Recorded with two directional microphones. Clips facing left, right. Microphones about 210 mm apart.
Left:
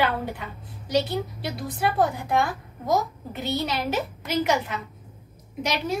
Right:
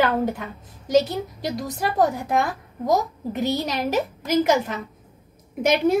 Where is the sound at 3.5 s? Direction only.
40° right (ahead or behind).